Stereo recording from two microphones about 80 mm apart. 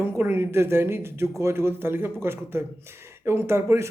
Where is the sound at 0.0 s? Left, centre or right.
Right.